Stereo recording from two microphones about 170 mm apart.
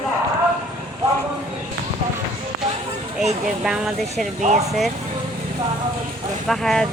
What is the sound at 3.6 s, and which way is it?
Speech, centre (ahead or behind).